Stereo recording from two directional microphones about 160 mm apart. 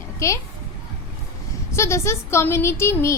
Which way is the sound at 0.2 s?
20° left (ahead or behind).